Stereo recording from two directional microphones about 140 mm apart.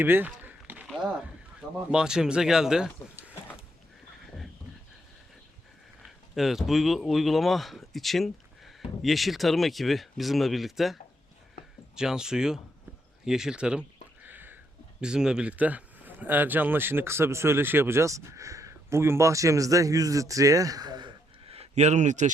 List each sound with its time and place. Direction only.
0.0 s a sound: 15° right (ahead or behind)
1.9 s speech: 5° right (ahead or behind)
6.1 s speech: centre (ahead or behind)
11.9 s speech: 5° right (ahead or behind)
14.3 s a sound: 15° right (ahead or behind)
15.0 s speech: 5° right (ahead or behind); by 22.3 s 60° right (ahead or behind)